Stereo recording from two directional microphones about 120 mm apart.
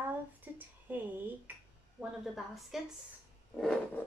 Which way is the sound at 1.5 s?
15° right (ahead or behind).